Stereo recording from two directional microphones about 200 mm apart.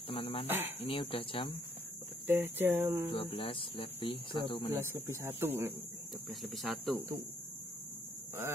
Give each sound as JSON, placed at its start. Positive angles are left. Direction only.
{"t": 0.1, "sound": "speech", "side_deg": 25}
{"t": 2.2, "sound": "speech", "side_deg": -10}
{"t": 3.1, "sound": "speech", "side_deg": 25}
{"t": 4.7, "sound": "speech", "side_deg": -15}
{"t": 6.4, "sound": "speech", "side_deg": 0}